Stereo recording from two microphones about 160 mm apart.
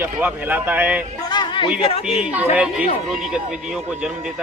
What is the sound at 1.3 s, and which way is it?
Chatter, 30° left (ahead or behind).